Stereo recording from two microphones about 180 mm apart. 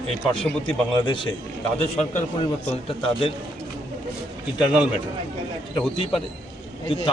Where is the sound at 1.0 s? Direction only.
25° left (ahead or behind).